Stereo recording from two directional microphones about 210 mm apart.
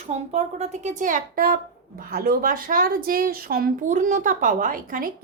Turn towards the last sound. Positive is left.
turn(degrees=-40)  # may be behind; listen again after turning